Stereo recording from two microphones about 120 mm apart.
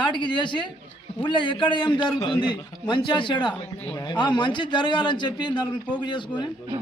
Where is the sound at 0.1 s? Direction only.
40° left (ahead or behind).